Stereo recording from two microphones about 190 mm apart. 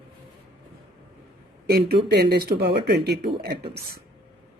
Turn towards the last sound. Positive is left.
turn(degrees=-55)  # may be behind; listen again after turning